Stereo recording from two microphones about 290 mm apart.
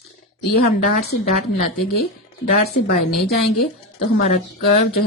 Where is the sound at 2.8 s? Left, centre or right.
Left.